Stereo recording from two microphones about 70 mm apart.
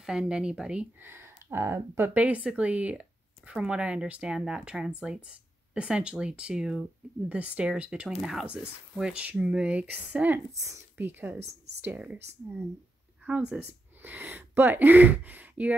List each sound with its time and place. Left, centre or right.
0.0 s speech: centre
1.0 s speech: right
2.1 s speech: centre
9.1 s speech: centre
10.5 s speech: right
11.0 s speech: right